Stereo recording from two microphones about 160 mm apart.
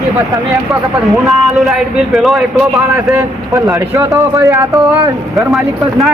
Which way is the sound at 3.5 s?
15° right (ahead or behind).